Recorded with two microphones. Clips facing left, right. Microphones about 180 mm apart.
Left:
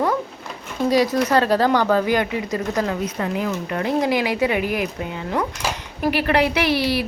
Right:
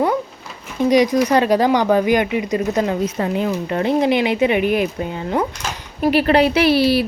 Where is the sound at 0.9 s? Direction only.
15° right (ahead or behind).